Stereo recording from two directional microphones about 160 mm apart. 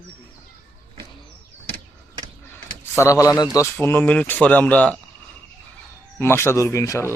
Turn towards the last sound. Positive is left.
turn(degrees=15)  # may be behind; listen again after turning